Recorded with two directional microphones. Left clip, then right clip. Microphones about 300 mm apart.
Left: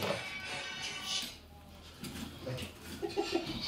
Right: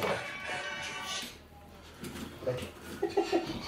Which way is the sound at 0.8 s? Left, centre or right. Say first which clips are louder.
Even; centre.